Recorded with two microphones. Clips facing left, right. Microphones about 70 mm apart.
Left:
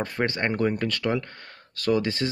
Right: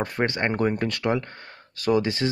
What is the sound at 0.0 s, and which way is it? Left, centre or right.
Speech, centre.